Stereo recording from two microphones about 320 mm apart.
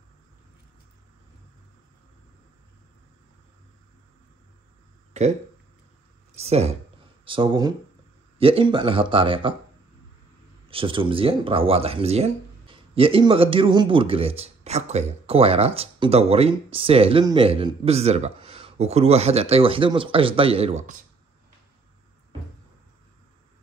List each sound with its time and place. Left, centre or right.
6.3 s a woman's voice: centre
10.7 s speech: centre